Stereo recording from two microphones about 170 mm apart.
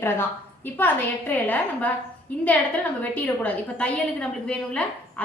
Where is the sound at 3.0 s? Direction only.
10° left (ahead or behind).